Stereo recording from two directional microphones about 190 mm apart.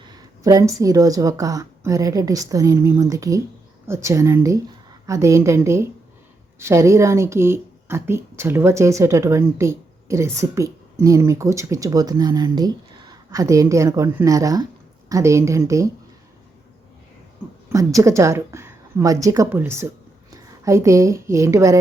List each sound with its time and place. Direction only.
0.0 s speech: 20° right (ahead or behind)
17.7 s a woman's voice: 15° right (ahead or behind)